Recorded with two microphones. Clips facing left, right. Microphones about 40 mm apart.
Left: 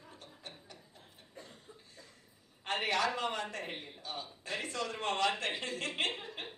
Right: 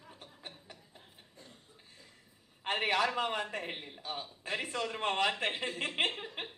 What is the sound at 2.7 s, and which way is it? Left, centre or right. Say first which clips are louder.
A man's voice: right 2 dB; centre.